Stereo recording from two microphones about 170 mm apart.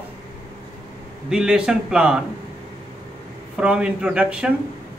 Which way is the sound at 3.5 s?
5° right (ahead or behind).